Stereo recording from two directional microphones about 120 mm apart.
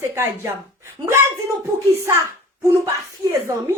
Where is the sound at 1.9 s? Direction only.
20° right (ahead or behind).